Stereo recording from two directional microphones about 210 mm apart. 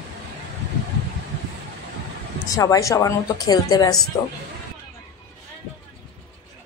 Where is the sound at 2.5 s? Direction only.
15° left (ahead or behind).